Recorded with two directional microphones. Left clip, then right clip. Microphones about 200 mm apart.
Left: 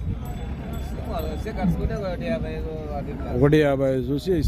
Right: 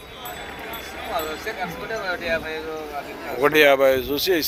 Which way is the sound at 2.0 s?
35° left (ahead or behind).